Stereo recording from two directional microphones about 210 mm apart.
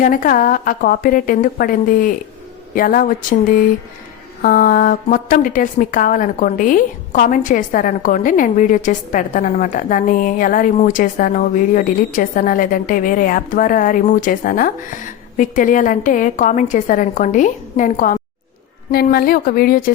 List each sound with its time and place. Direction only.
0.0 s a woman's voice: 40° left (ahead or behind)